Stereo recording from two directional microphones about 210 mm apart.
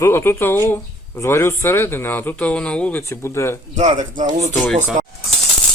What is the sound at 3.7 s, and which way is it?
Speech, 35° right (ahead or behind).